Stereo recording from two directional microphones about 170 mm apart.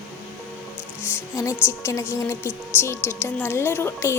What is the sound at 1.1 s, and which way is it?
Music, 15° left (ahead or behind).